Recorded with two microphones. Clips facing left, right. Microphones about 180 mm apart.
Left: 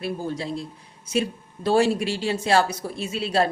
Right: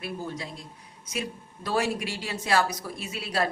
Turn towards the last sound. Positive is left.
turn(degrees=30)  # may be behind; listen again after turning